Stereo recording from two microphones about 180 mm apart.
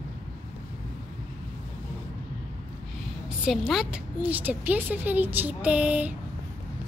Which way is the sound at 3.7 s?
5° right (ahead or behind).